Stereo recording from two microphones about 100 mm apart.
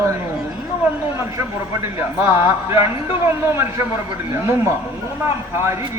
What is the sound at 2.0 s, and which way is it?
Speech, 25° right (ahead or behind).